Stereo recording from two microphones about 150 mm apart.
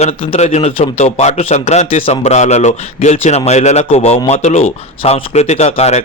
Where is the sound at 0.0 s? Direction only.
40° left (ahead or behind).